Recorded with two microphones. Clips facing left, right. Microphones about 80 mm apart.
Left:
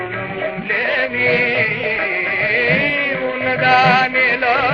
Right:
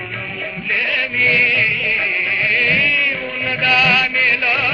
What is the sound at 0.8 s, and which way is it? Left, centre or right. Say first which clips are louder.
Music: left 2 dB; left.